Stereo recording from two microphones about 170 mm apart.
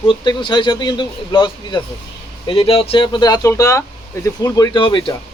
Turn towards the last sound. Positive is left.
turn(degrees=30)  # may be behind; listen again after turning